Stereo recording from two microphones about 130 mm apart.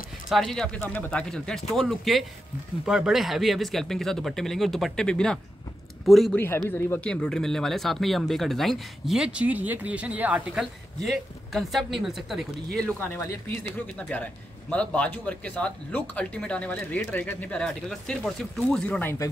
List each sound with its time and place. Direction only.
0.3 s speech: 5° left (ahead or behind)
6.3 s a man's voice: 15° left (ahead or behind); by 12.8 s centre (ahead or behind)
13.9 s a man's voice: 10° left (ahead or behind)